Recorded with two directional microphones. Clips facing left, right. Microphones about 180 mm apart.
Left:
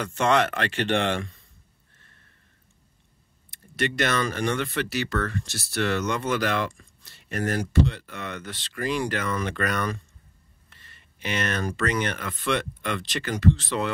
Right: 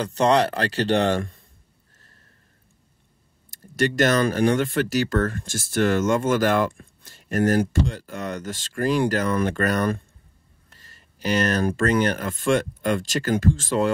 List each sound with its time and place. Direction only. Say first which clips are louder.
0.0 s speech: right 3 dB; 35° right (ahead or behind)
3.5 s speech: right 5 dB; 40° right (ahead or behind)
10.7 s a sound: right 2 dB; 40° right (ahead or behind)
11.6 s speech: right 6 dB; 50° right (ahead or behind)